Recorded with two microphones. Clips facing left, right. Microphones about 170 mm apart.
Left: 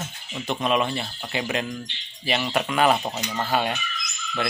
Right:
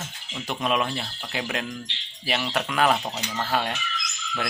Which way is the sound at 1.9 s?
90° right.